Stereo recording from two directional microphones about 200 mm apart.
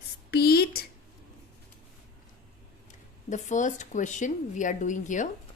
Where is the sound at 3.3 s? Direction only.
40° left (ahead or behind).